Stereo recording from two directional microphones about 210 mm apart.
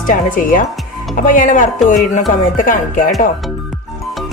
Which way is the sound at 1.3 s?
35° left (ahead or behind).